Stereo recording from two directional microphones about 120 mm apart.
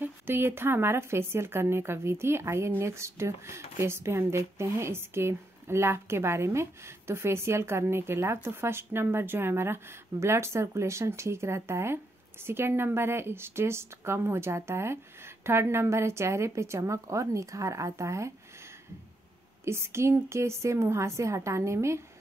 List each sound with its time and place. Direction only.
0.0 s speech: 20° right (ahead or behind)
19.6 s speech: 20° right (ahead or behind)